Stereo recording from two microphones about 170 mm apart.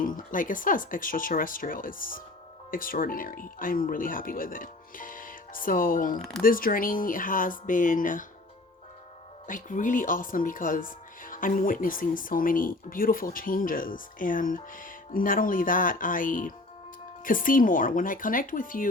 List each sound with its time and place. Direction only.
0.0 s speech: 50° left (ahead or behind)
9.5 s speech: 50° left (ahead or behind)